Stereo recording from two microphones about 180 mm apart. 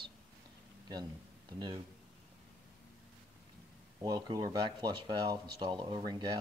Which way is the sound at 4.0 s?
25° right (ahead or behind).